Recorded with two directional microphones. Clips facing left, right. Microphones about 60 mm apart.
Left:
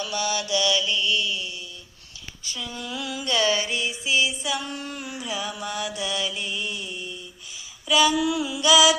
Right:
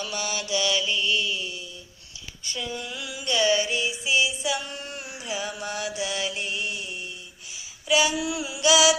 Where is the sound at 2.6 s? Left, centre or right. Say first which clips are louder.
Right 3 dB; right.